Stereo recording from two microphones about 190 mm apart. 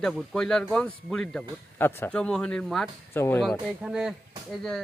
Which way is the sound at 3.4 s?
Centre (ahead or behind).